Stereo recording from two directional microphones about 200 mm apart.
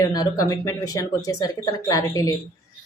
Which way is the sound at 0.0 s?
20° left (ahead or behind).